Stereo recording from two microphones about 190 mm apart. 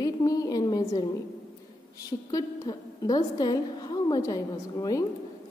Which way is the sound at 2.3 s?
20° left (ahead or behind).